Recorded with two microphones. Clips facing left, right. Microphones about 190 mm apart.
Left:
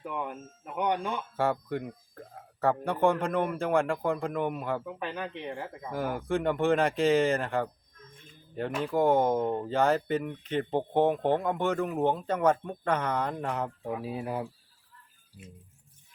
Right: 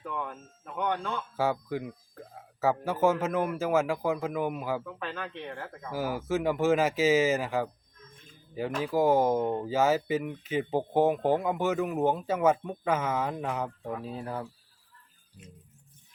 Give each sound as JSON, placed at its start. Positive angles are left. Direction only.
{"t": 0.0, "sound": "speech", "side_deg": 15}
{"t": 1.4, "sound": "speech", "side_deg": 0}
{"t": 4.9, "sound": "speech", "side_deg": 15}
{"t": 5.9, "sound": "speech", "side_deg": -5}
{"t": 8.8, "sound": "speech", "side_deg": -5}